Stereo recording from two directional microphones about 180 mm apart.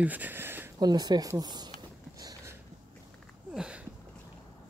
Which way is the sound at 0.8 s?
20° right (ahead or behind).